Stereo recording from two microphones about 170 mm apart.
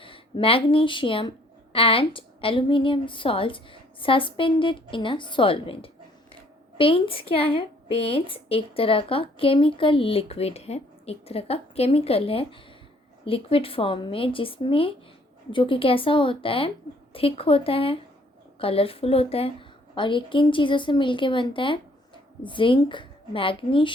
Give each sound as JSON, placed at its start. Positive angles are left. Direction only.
{"t": 0.0, "sound": "a woman's voice", "side_deg": 30}